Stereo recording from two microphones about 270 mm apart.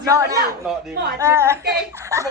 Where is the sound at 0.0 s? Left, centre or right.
Centre.